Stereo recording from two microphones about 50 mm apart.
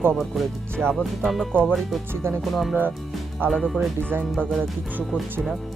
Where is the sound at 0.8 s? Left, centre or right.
Right.